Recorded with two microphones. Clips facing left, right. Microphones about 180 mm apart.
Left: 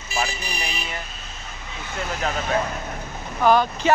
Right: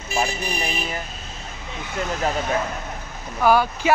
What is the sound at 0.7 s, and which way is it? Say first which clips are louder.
Vehicle: right 4 dB; 40° right (ahead or behind).